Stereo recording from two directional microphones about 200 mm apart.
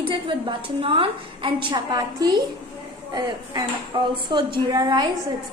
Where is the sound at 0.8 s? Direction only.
25° right (ahead or behind).